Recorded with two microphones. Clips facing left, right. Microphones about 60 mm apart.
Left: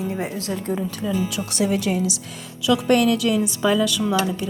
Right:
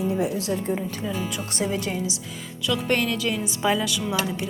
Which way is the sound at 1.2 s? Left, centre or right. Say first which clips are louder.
Left 4 dB; left.